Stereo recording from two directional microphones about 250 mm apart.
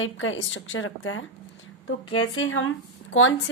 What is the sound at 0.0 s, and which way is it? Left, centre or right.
Speech, left.